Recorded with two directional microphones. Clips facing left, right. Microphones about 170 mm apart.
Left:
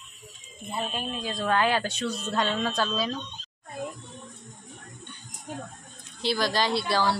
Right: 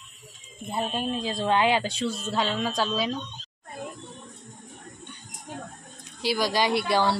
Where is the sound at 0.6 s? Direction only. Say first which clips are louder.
Right 4 dB; 30° right (ahead or behind).